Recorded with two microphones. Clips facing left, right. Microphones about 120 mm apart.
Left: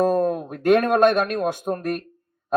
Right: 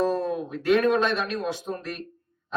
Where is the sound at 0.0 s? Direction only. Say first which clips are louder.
Left 5 dB; 50° left (ahead or behind).